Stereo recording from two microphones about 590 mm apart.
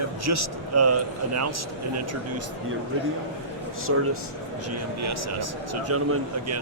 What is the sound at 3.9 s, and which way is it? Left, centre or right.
A man's voice, right.